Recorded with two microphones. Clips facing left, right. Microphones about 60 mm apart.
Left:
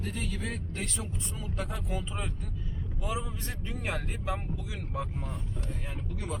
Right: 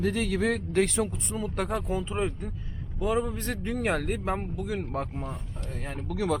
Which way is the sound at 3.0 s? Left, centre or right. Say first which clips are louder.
Right 9 dB; right.